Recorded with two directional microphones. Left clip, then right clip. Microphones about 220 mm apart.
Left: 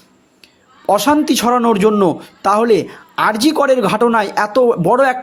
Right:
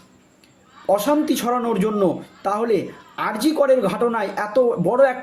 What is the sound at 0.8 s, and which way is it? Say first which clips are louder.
A man's voice: left 5 dB; 45° left (ahead or behind).